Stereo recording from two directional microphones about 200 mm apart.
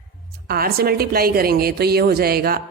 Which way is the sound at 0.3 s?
50° right (ahead or behind).